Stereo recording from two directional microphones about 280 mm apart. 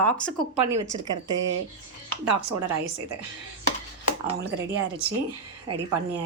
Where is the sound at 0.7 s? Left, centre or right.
Centre.